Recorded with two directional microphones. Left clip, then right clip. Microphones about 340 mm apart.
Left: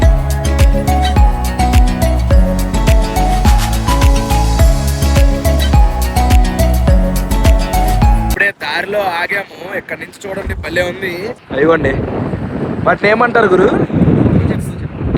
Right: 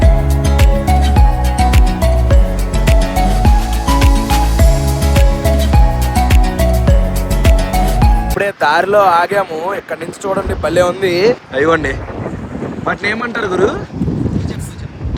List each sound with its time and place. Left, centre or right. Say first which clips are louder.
2.9 s music: even; centre
7.7 s music: left 1 dB; centre
10.8 s speech: right 4 dB; centre
11.5 s speech: left 1 dB; centre